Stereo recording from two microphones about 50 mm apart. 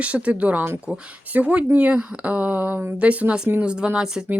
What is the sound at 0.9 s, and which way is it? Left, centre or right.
Speech, right.